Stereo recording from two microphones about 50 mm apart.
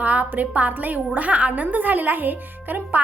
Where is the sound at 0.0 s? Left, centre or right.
Right.